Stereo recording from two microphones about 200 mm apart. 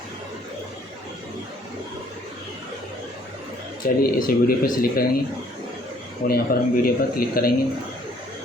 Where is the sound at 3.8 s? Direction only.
45° left (ahead or behind).